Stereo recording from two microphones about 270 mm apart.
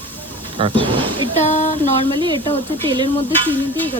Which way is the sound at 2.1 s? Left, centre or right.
Centre.